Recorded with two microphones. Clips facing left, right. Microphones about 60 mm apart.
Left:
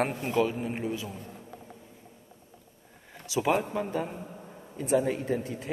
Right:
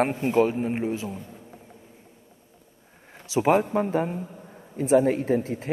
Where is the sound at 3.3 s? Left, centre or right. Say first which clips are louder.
Right 6 dB; right.